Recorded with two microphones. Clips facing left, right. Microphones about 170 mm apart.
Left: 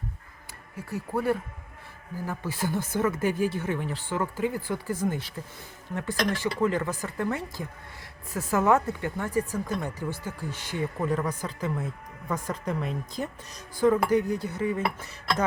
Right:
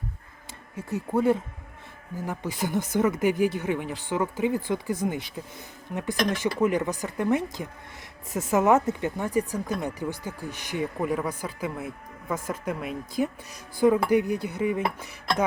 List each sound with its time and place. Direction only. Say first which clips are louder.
0.8 s speech: right 4 dB; 20° right (ahead or behind)